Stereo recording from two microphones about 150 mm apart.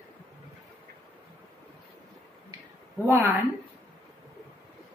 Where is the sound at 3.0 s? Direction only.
15° right (ahead or behind).